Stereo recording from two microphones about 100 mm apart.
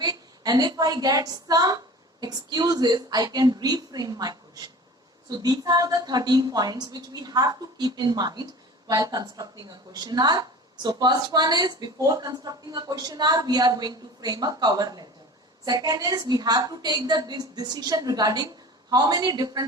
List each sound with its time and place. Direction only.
0.0 s a woman's voice: 40° right (ahead or behind)